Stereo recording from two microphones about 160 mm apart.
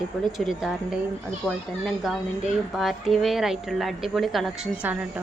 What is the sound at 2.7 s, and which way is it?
Speech, centre (ahead or behind).